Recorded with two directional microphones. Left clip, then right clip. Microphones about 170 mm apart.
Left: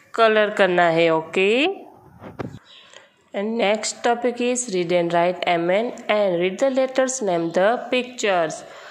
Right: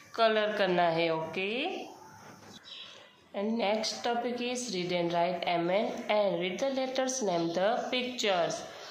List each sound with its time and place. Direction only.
0.1 s a woman's voice: 35° left (ahead or behind)
3.3 s a woman's voice: 50° left (ahead or behind)